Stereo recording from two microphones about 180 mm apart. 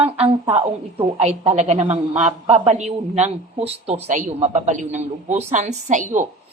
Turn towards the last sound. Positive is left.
turn(degrees=-45)  # may be behind; listen again after turning